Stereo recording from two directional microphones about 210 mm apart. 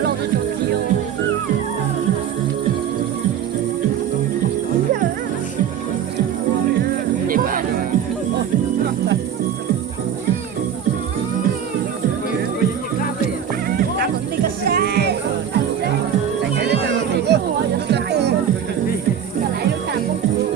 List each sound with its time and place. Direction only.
6.7 s music: 45° right (ahead or behind)
13.7 s music: 45° right (ahead or behind)
16.6 s music: 55° right (ahead or behind)